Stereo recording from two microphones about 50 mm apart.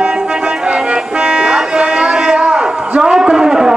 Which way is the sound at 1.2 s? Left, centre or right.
Centre.